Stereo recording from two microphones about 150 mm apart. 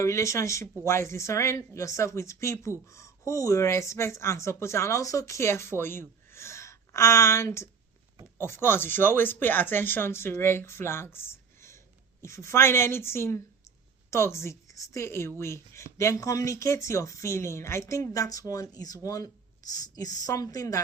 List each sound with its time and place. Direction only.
0.0 s a woman's voice: 20° left (ahead or behind)